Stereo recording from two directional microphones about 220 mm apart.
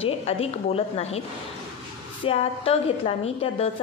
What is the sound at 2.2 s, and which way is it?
A woman's voice, 25° left (ahead or behind).